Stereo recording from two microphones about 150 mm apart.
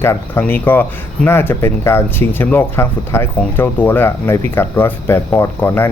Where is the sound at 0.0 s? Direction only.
15° left (ahead or behind).